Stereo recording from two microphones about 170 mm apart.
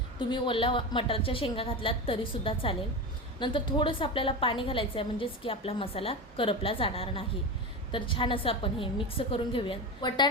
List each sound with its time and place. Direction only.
0.2 s a woman's voice: 30° left (ahead or behind)